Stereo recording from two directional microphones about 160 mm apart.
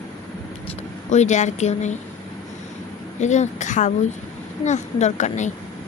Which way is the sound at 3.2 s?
45° left (ahead or behind).